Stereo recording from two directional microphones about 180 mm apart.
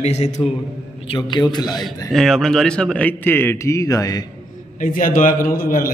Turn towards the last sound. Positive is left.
turn(degrees=50)  # may be behind; listen again after turning